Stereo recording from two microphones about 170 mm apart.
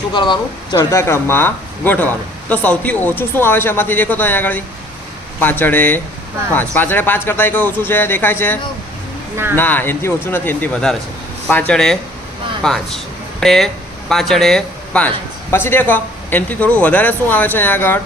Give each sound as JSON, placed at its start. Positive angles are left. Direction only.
{"t": 0.1, "sound": "speech", "side_deg": 25}
{"t": 0.8, "sound": "speech", "side_deg": 15}
{"t": 9.6, "sound": "speech", "side_deg": 10}